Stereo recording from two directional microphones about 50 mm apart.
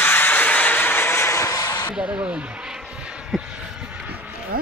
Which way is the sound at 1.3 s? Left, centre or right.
Left.